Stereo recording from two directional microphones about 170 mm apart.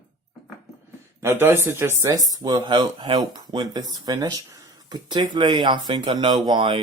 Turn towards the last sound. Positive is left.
turn(degrees=-30)  # may be behind; listen again after turning